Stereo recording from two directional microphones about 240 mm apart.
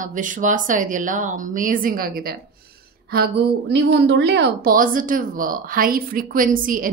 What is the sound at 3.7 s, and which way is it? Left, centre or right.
A woman's voice, right.